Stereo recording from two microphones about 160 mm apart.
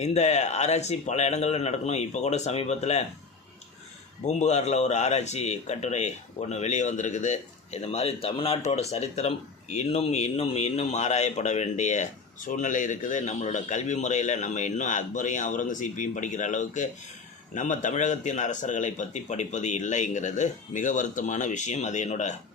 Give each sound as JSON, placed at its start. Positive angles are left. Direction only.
{"t": 0.0, "sound": "speech", "side_deg": 45}
{"t": 4.3, "sound": "speech", "side_deg": 45}